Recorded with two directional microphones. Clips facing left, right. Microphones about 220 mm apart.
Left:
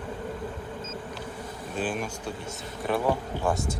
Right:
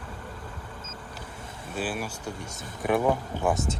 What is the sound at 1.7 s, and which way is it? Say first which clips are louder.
Speech: left 1 dB; 5° right (ahead or behind).